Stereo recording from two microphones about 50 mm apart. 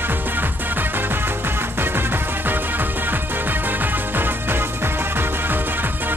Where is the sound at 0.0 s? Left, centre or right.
Right.